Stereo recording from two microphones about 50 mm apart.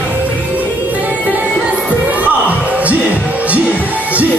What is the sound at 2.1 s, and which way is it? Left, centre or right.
Music, right.